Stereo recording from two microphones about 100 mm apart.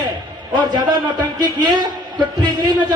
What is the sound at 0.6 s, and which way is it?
A man's voice, 45° right (ahead or behind).